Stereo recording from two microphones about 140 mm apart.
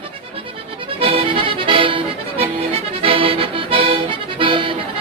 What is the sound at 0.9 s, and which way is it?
Music, 40° right (ahead or behind).